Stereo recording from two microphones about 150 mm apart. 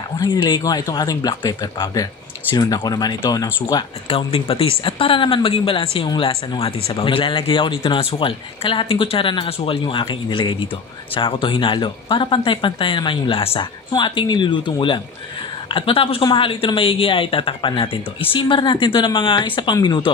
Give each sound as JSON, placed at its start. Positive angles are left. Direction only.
{"t": 0.2, "sound": "speech", "side_deg": 30}
{"t": 3.6, "sound": "speech", "side_deg": 35}